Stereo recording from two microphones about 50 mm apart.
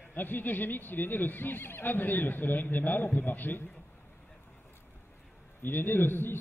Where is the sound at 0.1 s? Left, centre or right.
Left.